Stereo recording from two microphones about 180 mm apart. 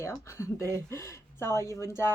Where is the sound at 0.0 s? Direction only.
15° left (ahead or behind).